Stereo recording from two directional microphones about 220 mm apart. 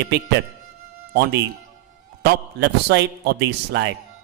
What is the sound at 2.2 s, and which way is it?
Speech, 50° right (ahead or behind).